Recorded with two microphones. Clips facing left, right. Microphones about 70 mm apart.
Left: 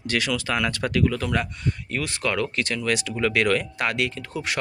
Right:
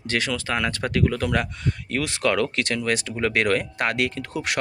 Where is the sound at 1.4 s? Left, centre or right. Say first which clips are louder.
Even; right.